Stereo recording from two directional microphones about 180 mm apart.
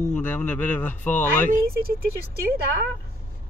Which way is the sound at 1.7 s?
55° right (ahead or behind).